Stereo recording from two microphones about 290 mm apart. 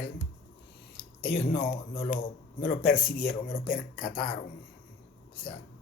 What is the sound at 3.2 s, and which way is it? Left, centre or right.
Speech, left.